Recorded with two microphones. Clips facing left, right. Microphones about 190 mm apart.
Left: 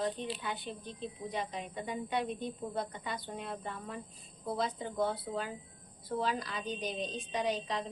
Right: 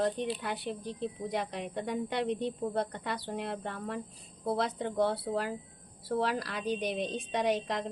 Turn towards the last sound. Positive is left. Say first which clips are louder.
# right 4 dB
turn(degrees=-70)  # may be behind; listen again after turning